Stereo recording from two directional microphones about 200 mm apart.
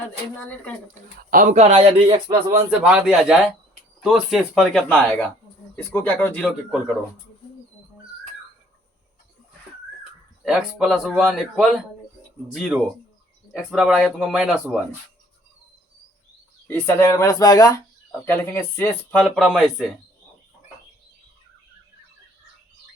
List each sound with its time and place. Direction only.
1.3 s speech: 40° right (ahead or behind); by 2.4 s 25° right (ahead or behind)
2.8 s a man's voice: centre (ahead or behind)
10.0 s a man's voice: 5° right (ahead or behind)
16.6 s a man's voice: 10° left (ahead or behind)